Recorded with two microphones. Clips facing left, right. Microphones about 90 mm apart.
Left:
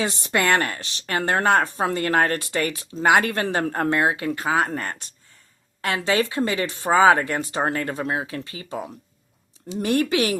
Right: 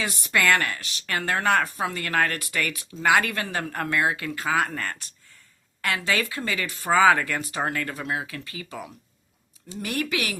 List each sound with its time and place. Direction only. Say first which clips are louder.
0.0 s speech: left 2 dB; 30° left (ahead or behind)
1.8 s speech: left 4 dB; 35° left (ahead or behind)